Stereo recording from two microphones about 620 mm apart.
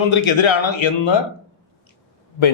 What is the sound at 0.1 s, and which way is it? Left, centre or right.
A man's voice, left.